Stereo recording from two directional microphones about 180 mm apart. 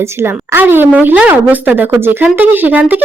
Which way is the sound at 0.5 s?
10° right (ahead or behind).